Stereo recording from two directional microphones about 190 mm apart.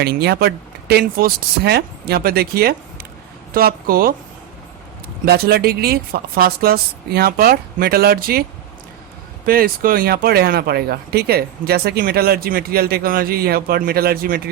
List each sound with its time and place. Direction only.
0.0 s speech: 55° right (ahead or behind)
5.2 s speech: 55° right (ahead or behind)
9.5 s speech: 50° right (ahead or behind)